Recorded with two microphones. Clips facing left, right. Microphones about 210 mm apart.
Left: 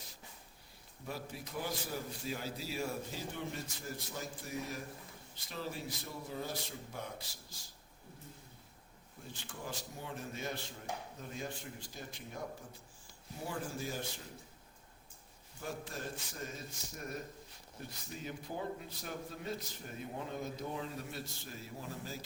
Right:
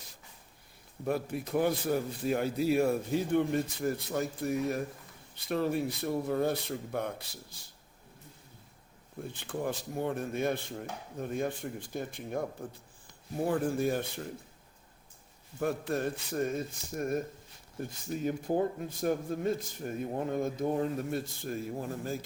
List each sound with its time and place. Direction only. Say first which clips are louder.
1.0 s a man's voice: right 12 dB; 55° right (ahead or behind)
9.2 s a man's voice: right 11 dB; 55° right (ahead or behind)
15.5 s a man's voice: right 12 dB; 60° right (ahead or behind)